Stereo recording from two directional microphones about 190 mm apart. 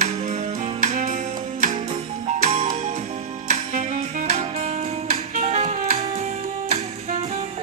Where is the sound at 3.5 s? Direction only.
35° right (ahead or behind).